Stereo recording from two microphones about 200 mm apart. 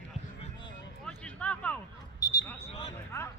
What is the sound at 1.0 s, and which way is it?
Music, 5° left (ahead or behind).